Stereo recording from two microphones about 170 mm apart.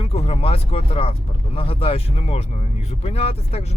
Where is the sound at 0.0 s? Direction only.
35° left (ahead or behind).